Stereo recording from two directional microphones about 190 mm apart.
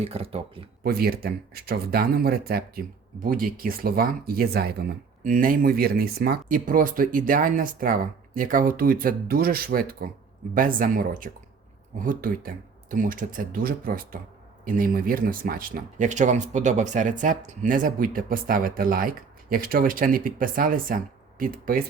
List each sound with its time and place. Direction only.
0.0 s speech: 30° right (ahead or behind)
0.9 s speech: 55° right (ahead or behind)